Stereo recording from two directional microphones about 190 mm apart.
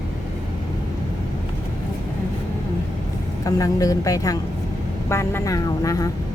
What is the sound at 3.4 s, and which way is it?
A woman's voice, 20° left (ahead or behind).